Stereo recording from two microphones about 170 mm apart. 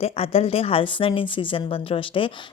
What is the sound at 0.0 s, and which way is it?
A woman's voice, 35° left (ahead or behind).